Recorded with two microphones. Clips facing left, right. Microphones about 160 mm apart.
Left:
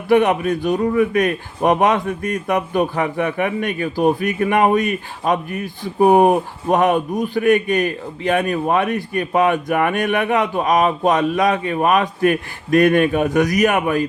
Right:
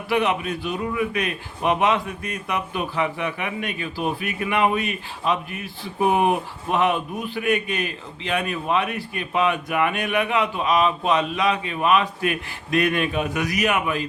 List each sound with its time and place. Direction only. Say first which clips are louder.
0.1 s a man's voice: left 8 dB; 45° left (ahead or behind)